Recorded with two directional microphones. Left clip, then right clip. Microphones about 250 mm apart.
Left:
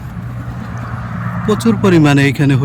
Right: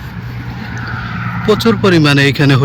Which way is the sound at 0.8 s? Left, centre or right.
Centre.